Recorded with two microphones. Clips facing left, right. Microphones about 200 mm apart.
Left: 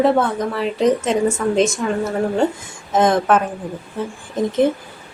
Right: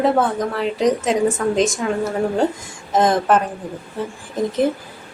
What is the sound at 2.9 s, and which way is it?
Speech, centre (ahead or behind).